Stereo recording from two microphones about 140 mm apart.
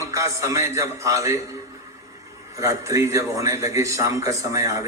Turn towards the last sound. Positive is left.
turn(degrees=-25)  # may be behind; listen again after turning